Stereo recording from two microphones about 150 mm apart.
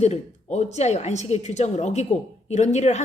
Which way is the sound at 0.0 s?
50° left (ahead or behind).